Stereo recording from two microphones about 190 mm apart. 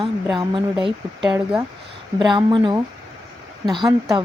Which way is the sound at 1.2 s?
5° right (ahead or behind).